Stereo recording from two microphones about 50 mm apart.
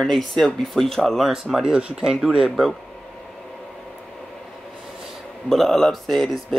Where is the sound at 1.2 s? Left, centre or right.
Centre.